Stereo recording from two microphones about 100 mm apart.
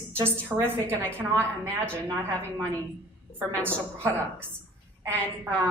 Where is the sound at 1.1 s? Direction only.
25° right (ahead or behind).